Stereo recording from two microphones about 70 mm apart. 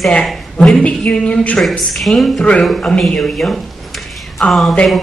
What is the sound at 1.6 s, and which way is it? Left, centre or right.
A woman's voice, centre.